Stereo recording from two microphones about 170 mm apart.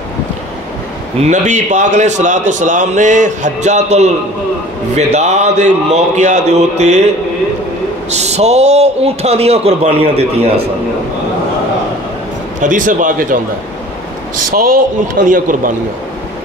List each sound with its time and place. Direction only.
1.2 s a man's voice: 45° right (ahead or behind)
8.1 s a man's voice: 40° right (ahead or behind)
12.5 s a man's voice: 50° right (ahead or behind)
14.5 s a man's voice: 50° right (ahead or behind)